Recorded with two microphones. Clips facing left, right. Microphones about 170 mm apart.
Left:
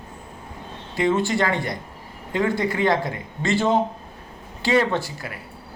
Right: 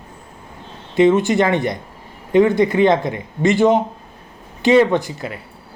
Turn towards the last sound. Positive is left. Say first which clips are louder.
# right 6 dB
turn(degrees=-20)  # may be behind; listen again after turning